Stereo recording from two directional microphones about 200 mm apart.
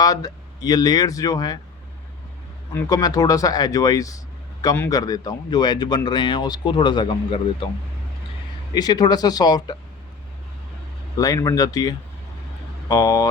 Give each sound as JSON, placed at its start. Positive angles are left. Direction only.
{"t": 0.0, "sound": "speech", "side_deg": 20}
{"t": 2.7, "sound": "speech", "side_deg": 20}
{"t": 8.7, "sound": "speech", "side_deg": 20}
{"t": 11.2, "sound": "speech", "side_deg": 15}